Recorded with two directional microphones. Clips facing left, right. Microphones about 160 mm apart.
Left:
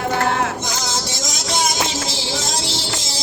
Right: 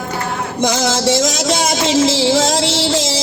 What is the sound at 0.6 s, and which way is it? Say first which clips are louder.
Music: right 10 dB; 85° right.